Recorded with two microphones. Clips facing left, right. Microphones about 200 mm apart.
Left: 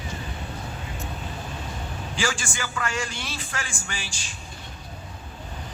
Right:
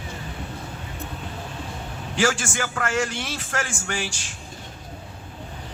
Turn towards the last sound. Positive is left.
turn(degrees=-65)  # may be behind; listen again after turning